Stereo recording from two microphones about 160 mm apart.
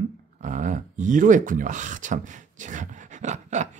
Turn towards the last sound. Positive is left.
turn(degrees=-50)  # may be behind; listen again after turning